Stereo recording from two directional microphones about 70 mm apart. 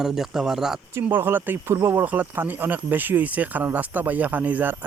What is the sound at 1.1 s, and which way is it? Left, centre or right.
Speech, right.